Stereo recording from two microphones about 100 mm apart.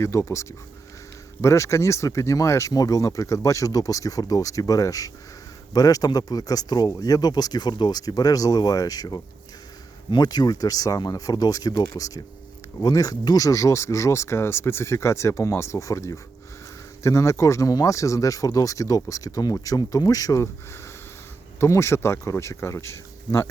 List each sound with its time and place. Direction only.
0.0 s speech: 30° left (ahead or behind)